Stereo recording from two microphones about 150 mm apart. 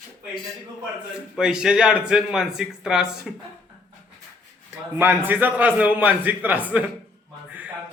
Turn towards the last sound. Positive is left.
turn(degrees=-10)  # may be behind; listen again after turning